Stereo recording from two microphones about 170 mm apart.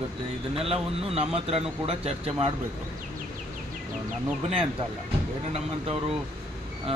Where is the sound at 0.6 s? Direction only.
35° right (ahead or behind).